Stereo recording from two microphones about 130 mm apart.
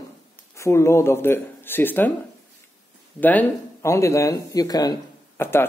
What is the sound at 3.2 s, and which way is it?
Speech, 15° left (ahead or behind).